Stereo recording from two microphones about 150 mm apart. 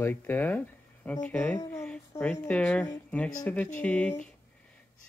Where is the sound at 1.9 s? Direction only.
5° left (ahead or behind).